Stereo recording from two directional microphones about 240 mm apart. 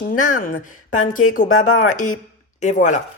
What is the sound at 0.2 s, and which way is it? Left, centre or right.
A man's voice, left.